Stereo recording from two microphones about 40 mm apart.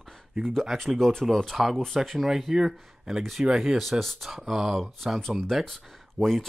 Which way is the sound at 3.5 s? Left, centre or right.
Centre.